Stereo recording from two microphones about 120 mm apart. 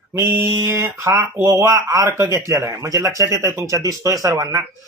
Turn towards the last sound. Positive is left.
turn(degrees=-30)  # may be behind; listen again after turning